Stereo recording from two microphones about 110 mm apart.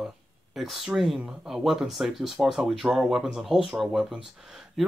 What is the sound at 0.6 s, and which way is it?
Speech, centre (ahead or behind).